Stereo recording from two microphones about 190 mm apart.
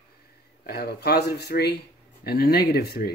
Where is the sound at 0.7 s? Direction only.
60° left (ahead or behind).